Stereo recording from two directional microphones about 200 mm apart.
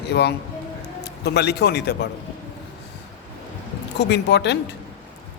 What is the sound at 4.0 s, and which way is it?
Speech, 60° left (ahead or behind).